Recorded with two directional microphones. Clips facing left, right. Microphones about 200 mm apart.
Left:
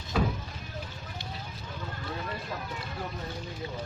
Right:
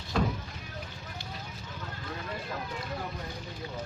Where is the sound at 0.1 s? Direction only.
5° left (ahead or behind).